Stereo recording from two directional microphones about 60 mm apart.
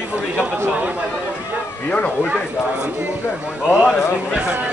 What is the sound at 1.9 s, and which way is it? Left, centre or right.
Speech, left.